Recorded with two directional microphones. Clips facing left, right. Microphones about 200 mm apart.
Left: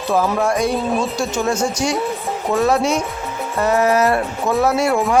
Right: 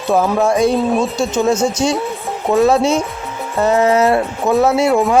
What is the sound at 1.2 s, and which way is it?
Speech, 20° right (ahead or behind).